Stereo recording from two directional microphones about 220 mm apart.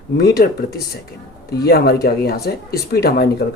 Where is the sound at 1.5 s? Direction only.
45° left (ahead or behind).